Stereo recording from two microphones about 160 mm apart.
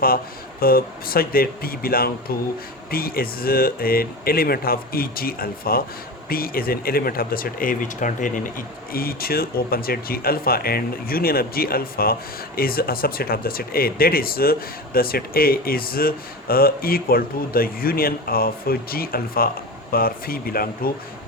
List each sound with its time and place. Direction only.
0.6 s speech: 65° left (ahead or behind)